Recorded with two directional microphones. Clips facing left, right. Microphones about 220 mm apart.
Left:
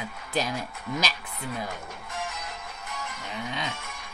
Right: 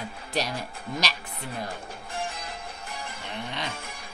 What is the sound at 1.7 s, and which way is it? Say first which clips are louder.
Music: right 1 dB; 30° right (ahead or behind).